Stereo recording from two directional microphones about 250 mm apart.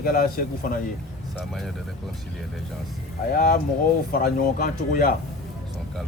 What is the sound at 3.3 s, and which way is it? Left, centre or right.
Speech, left.